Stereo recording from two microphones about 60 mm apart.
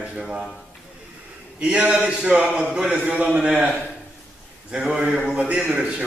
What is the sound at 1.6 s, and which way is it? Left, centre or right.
A man's voice, centre.